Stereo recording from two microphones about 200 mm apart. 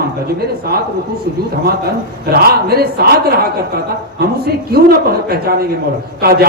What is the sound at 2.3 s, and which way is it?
A man's voice, 50° right (ahead or behind).